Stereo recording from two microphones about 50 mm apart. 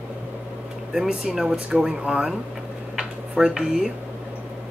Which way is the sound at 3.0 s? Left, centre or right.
Centre.